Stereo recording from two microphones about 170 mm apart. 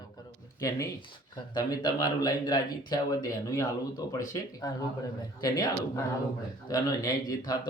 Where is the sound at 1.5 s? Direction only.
20° left (ahead or behind).